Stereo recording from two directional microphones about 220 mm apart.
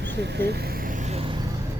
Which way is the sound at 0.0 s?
50° right (ahead or behind).